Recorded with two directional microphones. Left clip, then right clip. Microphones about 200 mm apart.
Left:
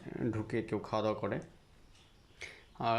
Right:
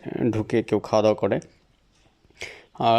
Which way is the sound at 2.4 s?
35° right (ahead or behind).